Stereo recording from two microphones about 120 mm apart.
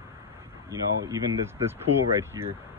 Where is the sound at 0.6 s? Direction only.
25° right (ahead or behind).